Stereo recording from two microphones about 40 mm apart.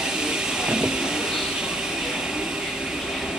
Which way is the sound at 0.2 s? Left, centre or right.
Centre.